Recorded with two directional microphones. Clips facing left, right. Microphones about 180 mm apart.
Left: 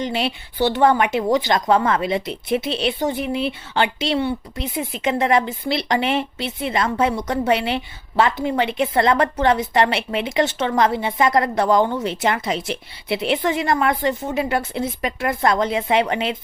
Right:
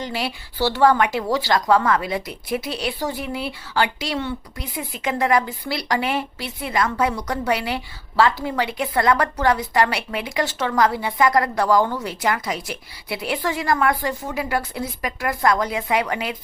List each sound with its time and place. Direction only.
0.0 s speech: 20° left (ahead or behind)